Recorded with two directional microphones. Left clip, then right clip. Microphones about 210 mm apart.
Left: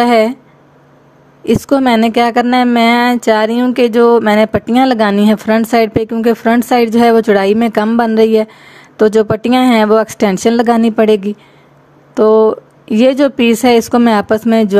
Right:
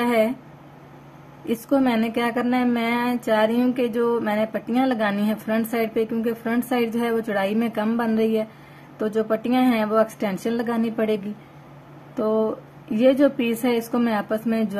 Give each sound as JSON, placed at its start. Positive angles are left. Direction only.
{"t": 0.0, "sound": "speech", "side_deg": 50}
{"t": 1.4, "sound": "speech", "side_deg": 45}